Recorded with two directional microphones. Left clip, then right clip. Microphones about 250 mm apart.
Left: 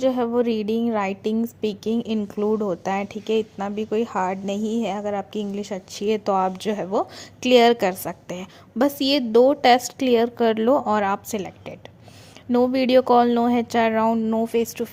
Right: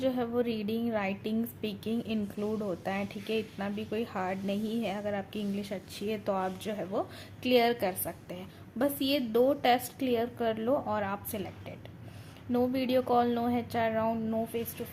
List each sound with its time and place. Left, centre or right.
0.0 s a woman's voice: left